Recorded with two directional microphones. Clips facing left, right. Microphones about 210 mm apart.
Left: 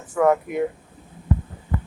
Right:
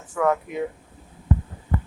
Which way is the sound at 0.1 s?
15° left (ahead or behind).